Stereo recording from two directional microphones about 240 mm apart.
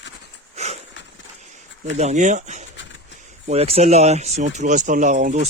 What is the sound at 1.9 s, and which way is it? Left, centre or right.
Speech, right.